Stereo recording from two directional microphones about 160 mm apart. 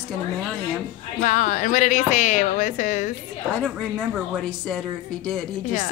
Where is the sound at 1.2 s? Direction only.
55° left (ahead or behind).